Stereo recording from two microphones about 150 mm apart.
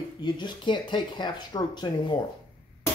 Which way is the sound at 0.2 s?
30° left (ahead or behind).